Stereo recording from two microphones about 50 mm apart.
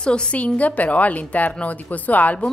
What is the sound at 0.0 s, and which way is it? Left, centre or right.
A woman's voice, centre.